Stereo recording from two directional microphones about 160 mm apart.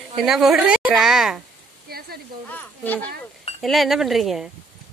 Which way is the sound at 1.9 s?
75° right (ahead or behind).